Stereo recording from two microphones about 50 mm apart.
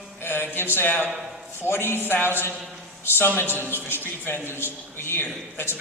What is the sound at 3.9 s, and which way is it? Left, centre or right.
A man's voice, left.